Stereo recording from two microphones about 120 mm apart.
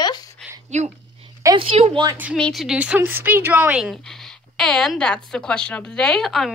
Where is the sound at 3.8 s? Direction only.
Centre (ahead or behind).